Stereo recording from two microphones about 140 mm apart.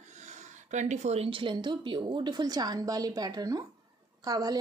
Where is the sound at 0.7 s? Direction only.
60° right (ahead or behind).